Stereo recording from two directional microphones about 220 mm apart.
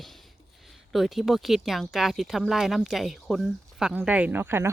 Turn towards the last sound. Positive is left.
turn(degrees=-10)  # may be behind; listen again after turning